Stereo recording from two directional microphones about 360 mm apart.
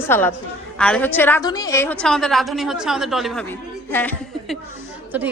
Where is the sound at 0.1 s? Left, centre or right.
Centre.